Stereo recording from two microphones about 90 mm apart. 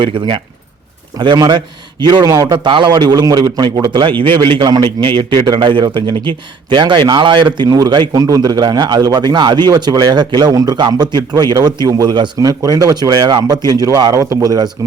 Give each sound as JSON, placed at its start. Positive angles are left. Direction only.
{"t": 0.0, "sound": "speech", "side_deg": -70}
{"t": 1.4, "sound": "a man's voice", "side_deg": -55}
{"t": 4.2, "sound": "a man's voice", "side_deg": -65}
{"t": 12.4, "sound": "a man's voice", "side_deg": -45}